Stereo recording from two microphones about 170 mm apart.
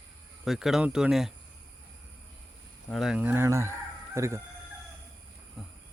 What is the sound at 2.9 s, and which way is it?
Speech, centre (ahead or behind).